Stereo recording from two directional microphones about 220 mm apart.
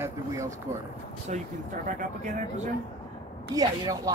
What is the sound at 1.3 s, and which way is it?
Speech, 35° right (ahead or behind).